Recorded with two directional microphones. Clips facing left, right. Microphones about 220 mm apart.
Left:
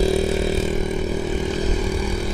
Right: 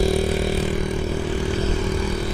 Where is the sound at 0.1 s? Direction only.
25° left (ahead or behind).